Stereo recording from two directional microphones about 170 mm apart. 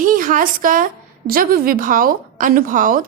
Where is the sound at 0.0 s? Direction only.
55° right (ahead or behind).